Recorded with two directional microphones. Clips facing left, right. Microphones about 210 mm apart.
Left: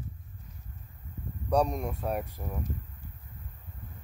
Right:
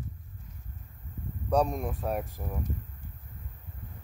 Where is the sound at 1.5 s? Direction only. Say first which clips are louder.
Even; centre (ahead or behind).